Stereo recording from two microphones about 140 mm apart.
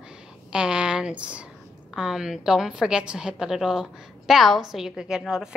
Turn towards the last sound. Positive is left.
turn(degrees=-5)  # may be behind; listen again after turning